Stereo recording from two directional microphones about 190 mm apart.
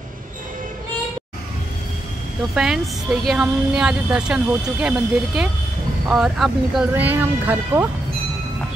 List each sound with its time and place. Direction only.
2.5 s speech: 5° right (ahead or behind)